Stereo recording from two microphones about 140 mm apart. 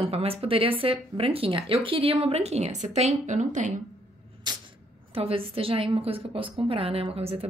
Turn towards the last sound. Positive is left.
turn(degrees=-45)  # may be behind; listen again after turning